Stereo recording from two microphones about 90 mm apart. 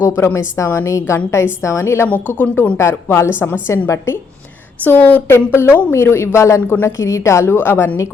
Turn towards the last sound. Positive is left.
turn(degrees=25)  # may be behind; listen again after turning